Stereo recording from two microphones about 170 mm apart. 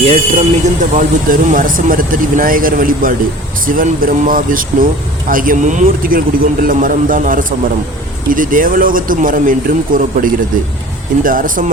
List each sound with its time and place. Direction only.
0.0 s a man's voice: 35° right (ahead or behind); by 11.6 s 55° right (ahead or behind)